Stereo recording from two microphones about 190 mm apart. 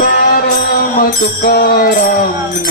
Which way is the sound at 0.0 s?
50° left (ahead or behind).